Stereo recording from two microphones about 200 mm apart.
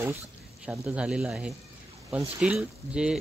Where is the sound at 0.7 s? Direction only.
5° right (ahead or behind).